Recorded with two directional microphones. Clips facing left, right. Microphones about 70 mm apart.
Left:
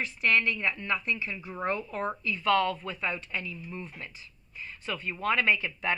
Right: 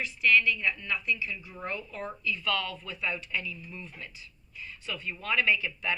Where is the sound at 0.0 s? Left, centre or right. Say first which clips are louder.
Right 1 dB; left.